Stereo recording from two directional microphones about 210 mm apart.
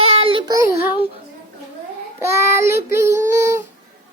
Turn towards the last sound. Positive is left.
turn(degrees=-15)  # may be behind; listen again after turning